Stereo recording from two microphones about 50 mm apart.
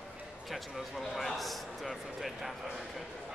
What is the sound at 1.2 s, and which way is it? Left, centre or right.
Speech, centre.